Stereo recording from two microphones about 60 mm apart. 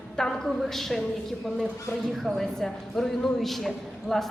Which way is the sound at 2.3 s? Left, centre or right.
Centre.